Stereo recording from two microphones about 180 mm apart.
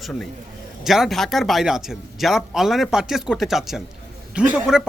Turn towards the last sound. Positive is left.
turn(degrees=-5)  # may be behind; listen again after turning